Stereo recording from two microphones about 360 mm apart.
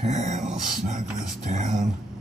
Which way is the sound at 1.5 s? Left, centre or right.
Centre.